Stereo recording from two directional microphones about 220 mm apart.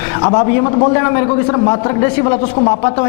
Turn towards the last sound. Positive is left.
turn(degrees=25)  # may be behind; listen again after turning